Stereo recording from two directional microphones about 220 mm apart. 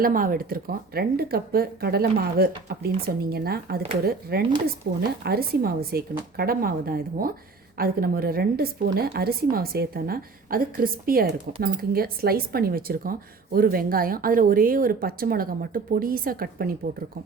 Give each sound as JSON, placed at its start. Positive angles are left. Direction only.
{"t": 0.0, "sound": "a woman's voice", "side_deg": -40}